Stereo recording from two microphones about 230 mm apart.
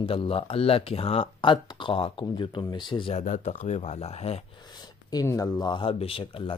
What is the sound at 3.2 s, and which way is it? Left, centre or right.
Speech, left.